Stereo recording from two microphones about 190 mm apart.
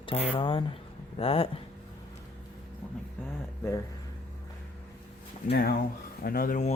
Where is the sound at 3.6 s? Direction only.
15° left (ahead or behind).